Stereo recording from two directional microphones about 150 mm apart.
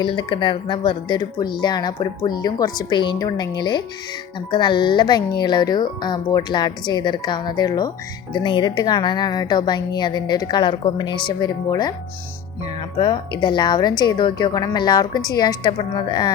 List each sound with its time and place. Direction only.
0.0 s speech: 35° left (ahead or behind)
13.0 s speech: 30° left (ahead or behind)